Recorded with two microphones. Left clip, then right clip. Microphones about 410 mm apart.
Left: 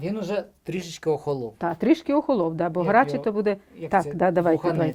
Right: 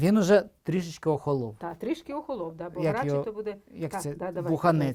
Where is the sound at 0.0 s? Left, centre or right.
Right.